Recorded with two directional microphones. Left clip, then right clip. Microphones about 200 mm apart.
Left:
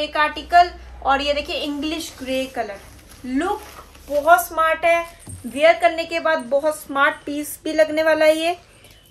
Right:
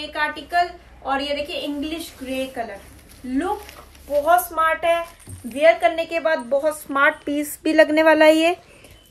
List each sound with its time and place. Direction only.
0.1 s a woman's voice: 15° left (ahead or behind)
4.2 s a woman's voice: centre (ahead or behind)
7.6 s a woman's voice: 30° right (ahead or behind)